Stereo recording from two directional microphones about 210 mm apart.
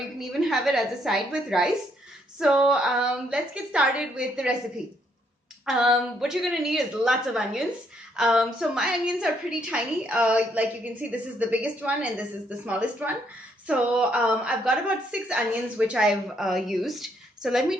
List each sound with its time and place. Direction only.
0.2 s a woman's voice: centre (ahead or behind)
5.6 s a woman's voice: 5° right (ahead or behind)